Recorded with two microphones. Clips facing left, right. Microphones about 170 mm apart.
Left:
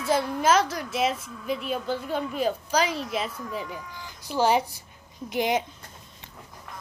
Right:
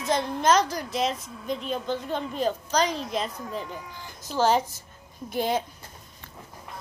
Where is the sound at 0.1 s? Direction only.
5° left (ahead or behind).